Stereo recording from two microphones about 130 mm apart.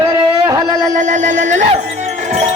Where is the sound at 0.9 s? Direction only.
70° right (ahead or behind).